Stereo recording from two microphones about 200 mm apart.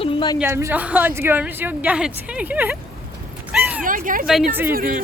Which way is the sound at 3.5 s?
5° right (ahead or behind).